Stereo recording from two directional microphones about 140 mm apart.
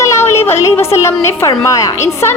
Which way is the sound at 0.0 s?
20° left (ahead or behind).